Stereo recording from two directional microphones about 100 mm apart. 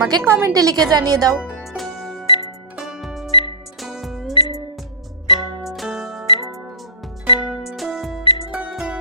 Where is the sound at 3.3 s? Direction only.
50° left (ahead or behind).